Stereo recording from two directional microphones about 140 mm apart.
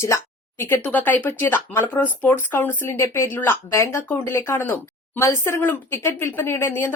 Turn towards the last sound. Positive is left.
turn(degrees=15)  # may be behind; listen again after turning